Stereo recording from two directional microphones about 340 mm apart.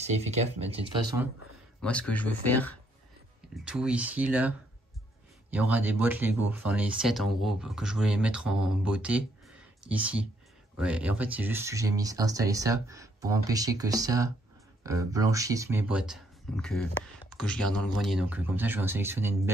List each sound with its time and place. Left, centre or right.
0.0 s speech: centre
1.8 s speech: centre